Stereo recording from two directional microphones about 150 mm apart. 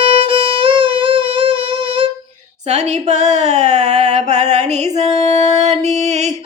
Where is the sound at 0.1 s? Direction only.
35° right (ahead or behind).